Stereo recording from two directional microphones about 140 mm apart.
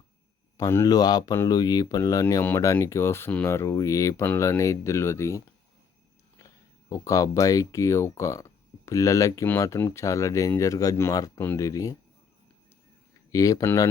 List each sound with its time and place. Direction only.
0.5 s speech: 20° left (ahead or behind)
6.9 s speech: 25° left (ahead or behind)
13.3 s speech: 25° left (ahead or behind)